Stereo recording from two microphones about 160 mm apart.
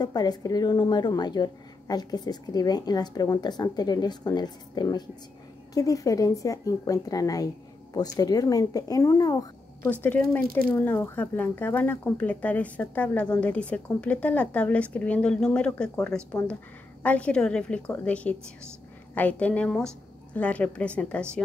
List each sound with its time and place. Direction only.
0.0 s a woman's voice: 25° left (ahead or behind)
10.0 s speech: 10° left (ahead or behind)